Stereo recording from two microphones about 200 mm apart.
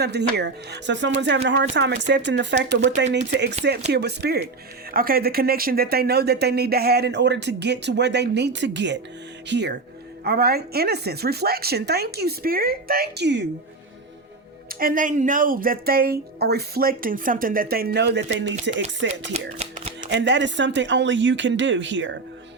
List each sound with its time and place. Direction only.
0.0 s speech: 55° right (ahead or behind)
14.8 s speech: 45° right (ahead or behind); by 19.3 s 65° right (ahead or behind)
19.3 s shuffling cards: 30° right (ahead or behind)
20.1 s speech: 60° right (ahead or behind)